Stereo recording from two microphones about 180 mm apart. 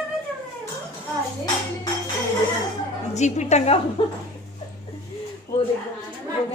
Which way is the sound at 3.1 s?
40° left (ahead or behind).